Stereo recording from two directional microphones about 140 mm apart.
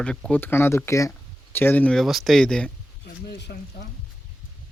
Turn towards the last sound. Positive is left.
turn(degrees=90)